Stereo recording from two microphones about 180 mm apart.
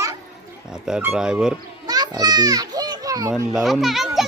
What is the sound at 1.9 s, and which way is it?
Children playing, 20° right (ahead or behind).